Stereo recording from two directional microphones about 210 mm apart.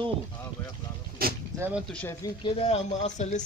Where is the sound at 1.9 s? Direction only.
10° left (ahead or behind).